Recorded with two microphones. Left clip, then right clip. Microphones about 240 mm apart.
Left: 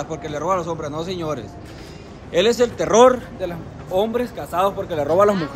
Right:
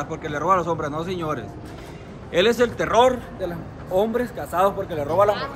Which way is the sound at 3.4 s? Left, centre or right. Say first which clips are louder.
Left 2 dB; centre.